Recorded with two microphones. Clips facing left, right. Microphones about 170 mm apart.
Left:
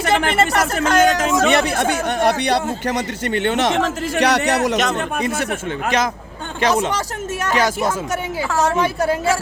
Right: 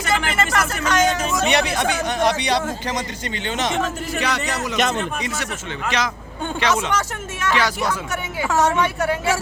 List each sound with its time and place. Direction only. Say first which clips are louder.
0.3 s a woman's voice: left 4 dB; 35° left (ahead or behind)
0.8 s speech: left 5 dB; 55° left (ahead or behind); by 1.5 s 90° left
1.5 s speech: left 3 dB; 50° left (ahead or behind); by 4.8 s 70° left (ahead or behind)
4.9 s a woman's voice: left 4 dB; 55° left (ahead or behind)
8.7 s a woman's voice: left 2 dB; 35° left (ahead or behind)